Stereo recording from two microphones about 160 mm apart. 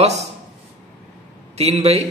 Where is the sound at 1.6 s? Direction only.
40° right (ahead or behind).